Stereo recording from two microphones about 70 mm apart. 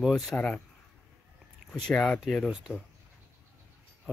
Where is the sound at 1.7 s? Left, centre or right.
Centre.